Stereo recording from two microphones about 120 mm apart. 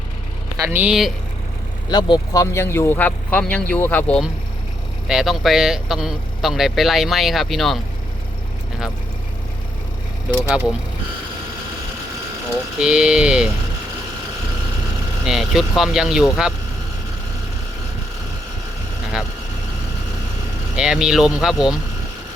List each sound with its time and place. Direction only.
0.6 s speech: 15° right (ahead or behind)
0.9 s speech: centre (ahead or behind)
1.9 s speech: 35° left (ahead or behind); by 4.2 s 10° left (ahead or behind)
5.0 s speech: 5° right (ahead or behind)
10.5 s speech: 10° right (ahead or behind)
12.8 s speech: 5° right (ahead or behind)
15.2 s speech: 5° right (ahead or behind)
20.7 s speech: 5° right (ahead or behind)